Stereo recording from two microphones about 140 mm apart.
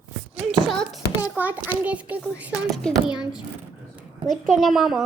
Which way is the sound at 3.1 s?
30° left (ahead or behind).